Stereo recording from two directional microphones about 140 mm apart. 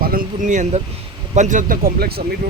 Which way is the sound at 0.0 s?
90° right.